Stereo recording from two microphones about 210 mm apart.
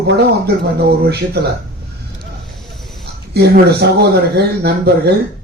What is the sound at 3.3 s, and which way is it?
Speech, 50° right (ahead or behind).